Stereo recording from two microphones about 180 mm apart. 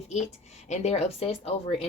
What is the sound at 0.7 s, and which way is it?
A woman's voice, 35° left (ahead or behind).